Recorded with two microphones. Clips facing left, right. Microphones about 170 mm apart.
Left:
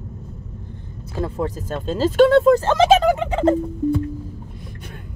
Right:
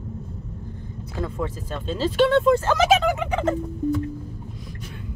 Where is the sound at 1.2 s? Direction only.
40° left (ahead or behind).